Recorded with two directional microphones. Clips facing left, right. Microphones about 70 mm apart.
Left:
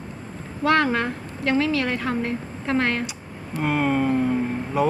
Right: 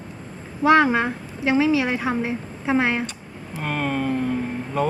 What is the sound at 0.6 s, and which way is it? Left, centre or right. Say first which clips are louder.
A woman's voice: right 4 dB; centre.